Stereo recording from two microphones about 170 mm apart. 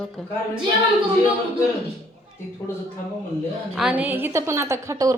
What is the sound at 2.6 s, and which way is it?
Speech, 15° left (ahead or behind).